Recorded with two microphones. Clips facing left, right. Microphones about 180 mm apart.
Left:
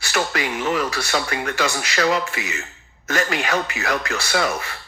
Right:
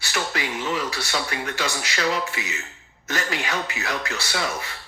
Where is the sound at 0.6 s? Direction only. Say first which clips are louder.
Left 6 dB; 65° left (ahead or behind).